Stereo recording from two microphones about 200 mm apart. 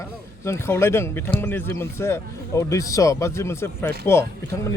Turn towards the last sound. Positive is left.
turn(degrees=10)  # may be behind; listen again after turning